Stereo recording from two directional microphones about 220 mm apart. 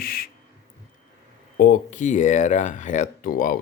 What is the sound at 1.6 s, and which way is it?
Speech, 35° left (ahead or behind).